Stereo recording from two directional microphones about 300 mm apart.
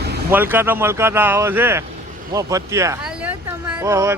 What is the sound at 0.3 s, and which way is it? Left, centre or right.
Speech, centre.